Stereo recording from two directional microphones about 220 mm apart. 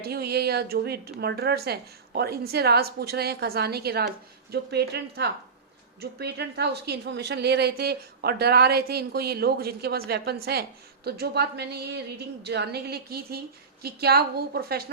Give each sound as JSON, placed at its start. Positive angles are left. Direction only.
{"t": 0.0, "sound": "speech", "side_deg": -45}